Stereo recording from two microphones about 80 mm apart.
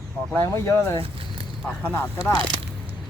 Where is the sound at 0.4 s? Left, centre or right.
Left.